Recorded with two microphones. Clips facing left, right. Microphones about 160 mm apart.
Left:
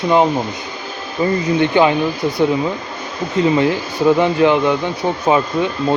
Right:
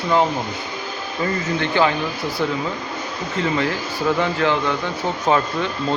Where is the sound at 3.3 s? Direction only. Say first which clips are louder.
Left 7 dB; 20° left (ahead or behind).